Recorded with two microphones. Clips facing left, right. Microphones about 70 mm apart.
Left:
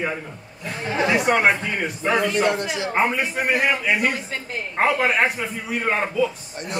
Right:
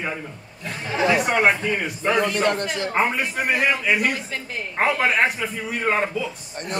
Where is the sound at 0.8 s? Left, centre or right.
Centre.